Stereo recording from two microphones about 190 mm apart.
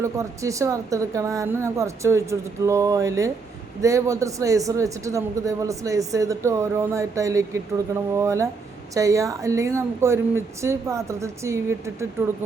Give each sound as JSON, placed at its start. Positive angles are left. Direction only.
{"t": 0.0, "sound": "speech", "side_deg": -15}